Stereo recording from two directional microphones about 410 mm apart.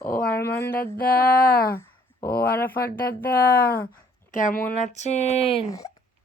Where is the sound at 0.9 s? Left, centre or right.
Left.